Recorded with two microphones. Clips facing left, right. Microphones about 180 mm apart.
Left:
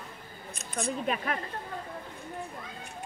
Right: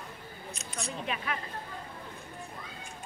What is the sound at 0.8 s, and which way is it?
Speech, 45° left (ahead or behind).